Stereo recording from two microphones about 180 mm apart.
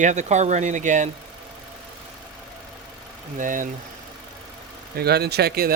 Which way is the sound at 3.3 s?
45° right (ahead or behind).